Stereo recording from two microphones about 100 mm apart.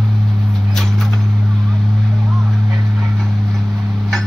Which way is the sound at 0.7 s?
5° left (ahead or behind).